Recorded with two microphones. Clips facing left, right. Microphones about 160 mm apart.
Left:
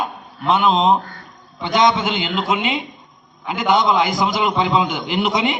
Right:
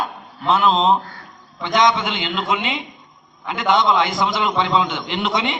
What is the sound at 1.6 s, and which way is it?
Mantra, 25° left (ahead or behind).